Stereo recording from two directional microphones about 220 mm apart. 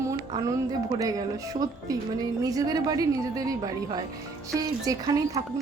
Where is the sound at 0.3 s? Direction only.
20° right (ahead or behind).